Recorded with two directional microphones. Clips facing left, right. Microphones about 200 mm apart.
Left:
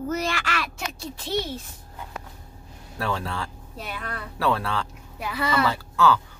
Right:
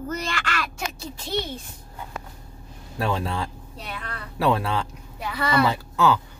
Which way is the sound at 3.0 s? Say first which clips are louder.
Right 3 dB; 20° right (ahead or behind).